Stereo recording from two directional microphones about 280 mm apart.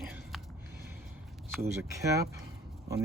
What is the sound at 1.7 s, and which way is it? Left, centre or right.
Speech, centre.